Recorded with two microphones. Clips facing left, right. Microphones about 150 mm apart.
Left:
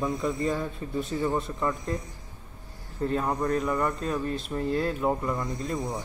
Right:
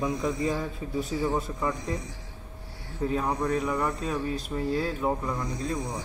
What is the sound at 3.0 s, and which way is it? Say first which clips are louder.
Speech: even; 5° right (ahead or behind).